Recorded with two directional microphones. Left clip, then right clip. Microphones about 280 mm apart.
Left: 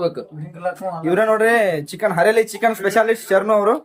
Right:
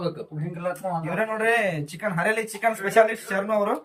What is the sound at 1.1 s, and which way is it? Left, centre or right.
Speech, left.